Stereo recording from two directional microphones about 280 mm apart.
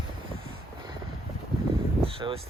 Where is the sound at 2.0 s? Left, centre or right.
Centre.